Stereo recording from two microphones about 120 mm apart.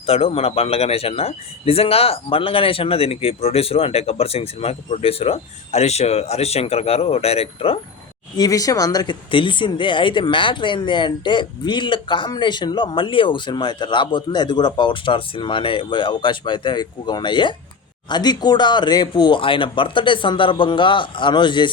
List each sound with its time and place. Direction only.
0.0 s speech: 55° left (ahead or behind)
8.4 s speech: 30° left (ahead or behind)